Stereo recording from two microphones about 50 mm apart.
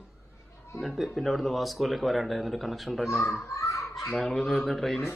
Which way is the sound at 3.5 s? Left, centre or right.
Left.